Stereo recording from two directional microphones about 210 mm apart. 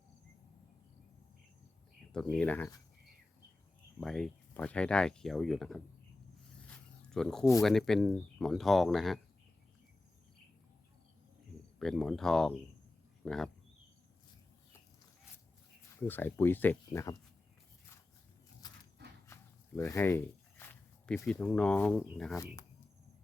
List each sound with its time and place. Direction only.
2.0 s speech: centre (ahead or behind)
4.0 s speech: centre (ahead or behind)
6.7 s a sound: 5° left (ahead or behind)
7.6 s speech: centre (ahead or behind)
11.8 s speech: centre (ahead or behind)
16.0 s speech: 10° left (ahead or behind)
18.6 s a sound: 20° left (ahead or behind)
19.3 s walk: 15° left (ahead or behind)